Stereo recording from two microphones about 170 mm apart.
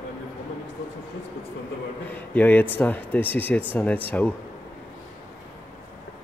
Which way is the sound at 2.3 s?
10° left (ahead or behind).